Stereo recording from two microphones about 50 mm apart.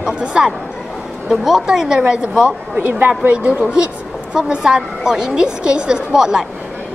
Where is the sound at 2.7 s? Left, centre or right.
Right.